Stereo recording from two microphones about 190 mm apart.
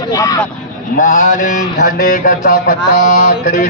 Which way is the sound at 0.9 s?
50° left (ahead or behind).